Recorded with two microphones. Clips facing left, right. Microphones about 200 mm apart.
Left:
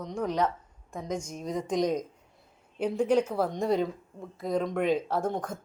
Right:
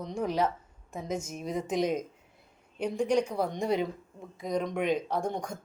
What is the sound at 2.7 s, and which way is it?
A woman's voice, 5° left (ahead or behind).